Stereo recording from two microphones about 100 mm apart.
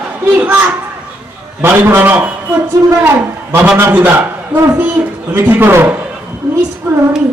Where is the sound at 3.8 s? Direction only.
20° right (ahead or behind).